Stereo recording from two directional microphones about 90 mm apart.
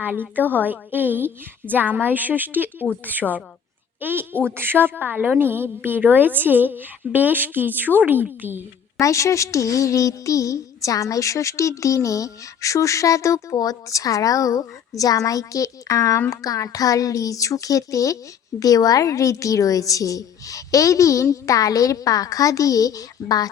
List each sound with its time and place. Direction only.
0.0 s a woman's voice: 20° right (ahead or behind)
4.0 s a woman's voice: 25° right (ahead or behind)
9.0 s a child's voice: 35° left (ahead or behind)